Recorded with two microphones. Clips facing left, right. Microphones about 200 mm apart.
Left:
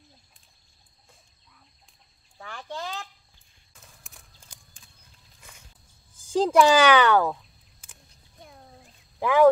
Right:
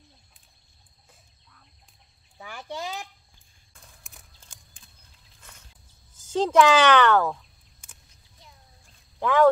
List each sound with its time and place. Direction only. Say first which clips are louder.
2.3 s speech: right 1 dB; 10° right (ahead or behind)
3.7 s a sound: even; centre (ahead or behind)
6.1 s speech: even; 10° left (ahead or behind)
8.4 s cat: left 7 dB; 55° left (ahead or behind)
9.2 s speech: left 1 dB; 10° left (ahead or behind)